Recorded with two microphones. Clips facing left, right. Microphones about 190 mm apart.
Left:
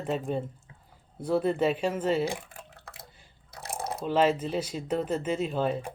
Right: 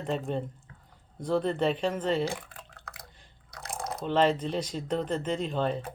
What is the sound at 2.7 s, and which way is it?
Drip, 25° left (ahead or behind).